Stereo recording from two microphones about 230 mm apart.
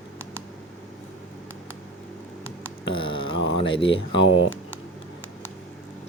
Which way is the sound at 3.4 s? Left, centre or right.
Left.